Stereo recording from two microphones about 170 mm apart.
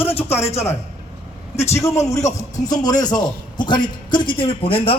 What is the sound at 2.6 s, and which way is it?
A man's voice, 20° left (ahead or behind).